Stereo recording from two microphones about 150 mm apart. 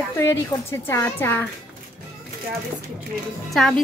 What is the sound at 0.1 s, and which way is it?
A woman's voice, 20° left (ahead or behind).